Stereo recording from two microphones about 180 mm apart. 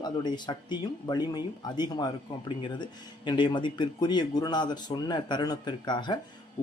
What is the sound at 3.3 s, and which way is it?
Speech, 25° left (ahead or behind).